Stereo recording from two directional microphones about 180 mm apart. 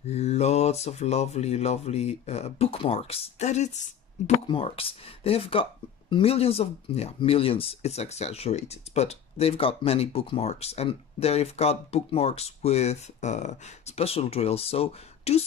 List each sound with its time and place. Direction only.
0.0 s speech: 35° left (ahead or behind)